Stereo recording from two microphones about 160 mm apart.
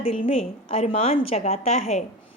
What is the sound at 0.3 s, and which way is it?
A woman's voice, 40° left (ahead or behind).